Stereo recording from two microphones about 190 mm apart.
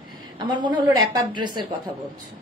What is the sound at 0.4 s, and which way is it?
A woman's voice, 25° right (ahead or behind).